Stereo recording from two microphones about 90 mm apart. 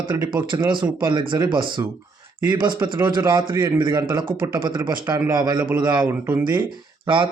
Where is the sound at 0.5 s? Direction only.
45° right (ahead or behind).